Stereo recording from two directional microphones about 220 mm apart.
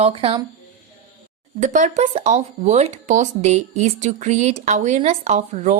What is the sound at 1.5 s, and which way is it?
A woman's voice, 35° right (ahead or behind).